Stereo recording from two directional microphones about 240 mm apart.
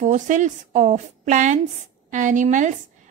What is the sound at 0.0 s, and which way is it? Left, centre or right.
Speech, right.